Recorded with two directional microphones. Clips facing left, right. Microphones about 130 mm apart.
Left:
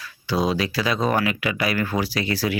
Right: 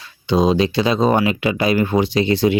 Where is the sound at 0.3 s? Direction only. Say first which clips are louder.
Right 7 dB; 20° right (ahead or behind).